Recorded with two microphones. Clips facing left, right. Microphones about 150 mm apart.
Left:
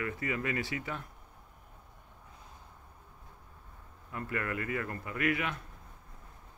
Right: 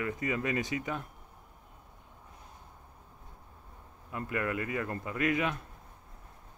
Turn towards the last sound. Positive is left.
turn(degrees=-20)  # may be behind; listen again after turning